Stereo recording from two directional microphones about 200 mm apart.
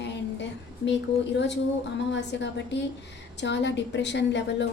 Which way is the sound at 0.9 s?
60° left (ahead or behind).